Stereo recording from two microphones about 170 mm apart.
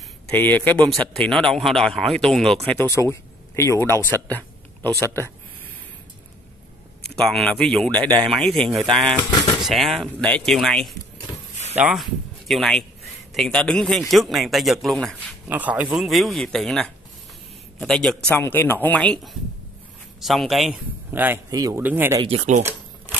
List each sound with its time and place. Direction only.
0.3 s speech: 10° left (ahead or behind)
7.0 s speech: centre (ahead or behind)
9.3 s a sound: 25° left (ahead or behind)
9.6 s speech: centre (ahead or behind)
21.1 s speech: 10° right (ahead or behind)
22.2 s speech: 40° right (ahead or behind)